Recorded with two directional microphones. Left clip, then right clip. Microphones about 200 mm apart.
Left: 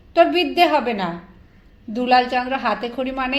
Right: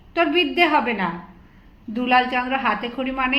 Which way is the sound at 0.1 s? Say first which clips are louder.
Left 4 dB; 40° left (ahead or behind).